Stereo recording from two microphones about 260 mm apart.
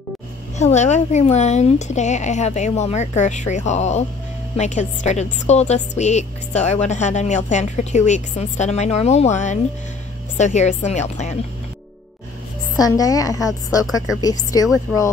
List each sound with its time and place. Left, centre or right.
0.6 s a woman's voice: left
12.7 s a woman's voice: centre
14.9 s speech: centre